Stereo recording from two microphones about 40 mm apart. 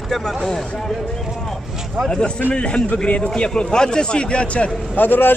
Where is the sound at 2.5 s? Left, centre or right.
Left.